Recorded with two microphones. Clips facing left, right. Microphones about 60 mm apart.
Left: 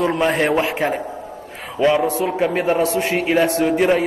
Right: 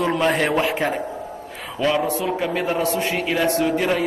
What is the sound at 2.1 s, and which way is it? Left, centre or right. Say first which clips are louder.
A man's voice: left 3 dB; left.